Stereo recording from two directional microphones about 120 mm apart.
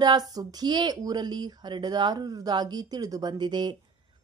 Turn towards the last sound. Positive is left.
turn(degrees=-35)  # may be behind; listen again after turning